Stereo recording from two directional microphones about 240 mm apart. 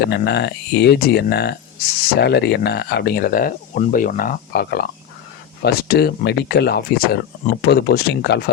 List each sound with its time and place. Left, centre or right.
0.0 s speech: left